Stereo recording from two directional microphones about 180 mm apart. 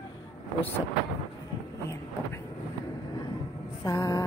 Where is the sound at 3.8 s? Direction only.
20° left (ahead or behind).